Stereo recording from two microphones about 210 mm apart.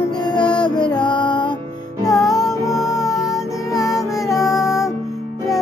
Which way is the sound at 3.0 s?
15° left (ahead or behind).